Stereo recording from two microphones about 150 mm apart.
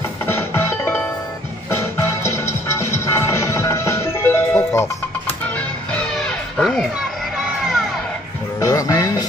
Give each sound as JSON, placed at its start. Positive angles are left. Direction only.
{"t": 0.3, "sound": "music", "side_deg": 15}
{"t": 5.9, "sound": "music", "side_deg": 5}
{"t": 8.5, "sound": "music", "side_deg": 20}